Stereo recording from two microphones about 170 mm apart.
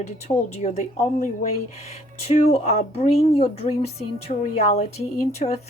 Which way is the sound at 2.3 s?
45° left (ahead or behind).